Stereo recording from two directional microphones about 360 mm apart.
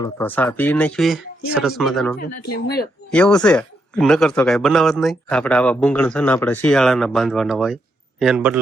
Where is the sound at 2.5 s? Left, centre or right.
Left.